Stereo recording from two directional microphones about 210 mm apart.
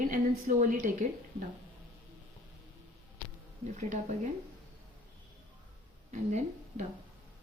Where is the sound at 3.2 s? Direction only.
10° left (ahead or behind).